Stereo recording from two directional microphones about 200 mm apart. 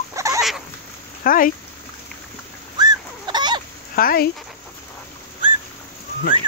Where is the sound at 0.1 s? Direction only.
15° right (ahead or behind).